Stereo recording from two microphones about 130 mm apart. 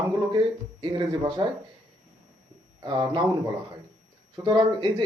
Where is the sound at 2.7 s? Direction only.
35° right (ahead or behind).